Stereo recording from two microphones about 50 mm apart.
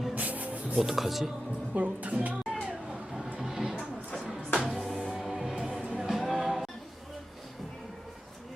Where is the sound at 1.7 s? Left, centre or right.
Right.